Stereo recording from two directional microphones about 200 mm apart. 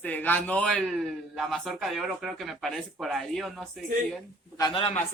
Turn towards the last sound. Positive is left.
turn(degrees=25)  # may be behind; listen again after turning